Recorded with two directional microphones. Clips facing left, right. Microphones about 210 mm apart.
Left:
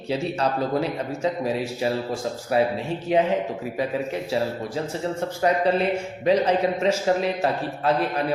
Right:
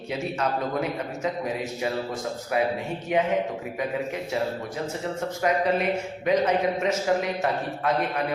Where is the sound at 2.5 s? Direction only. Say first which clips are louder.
Left 3 dB; 30° left (ahead or behind).